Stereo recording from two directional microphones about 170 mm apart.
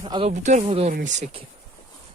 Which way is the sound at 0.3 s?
40° right (ahead or behind).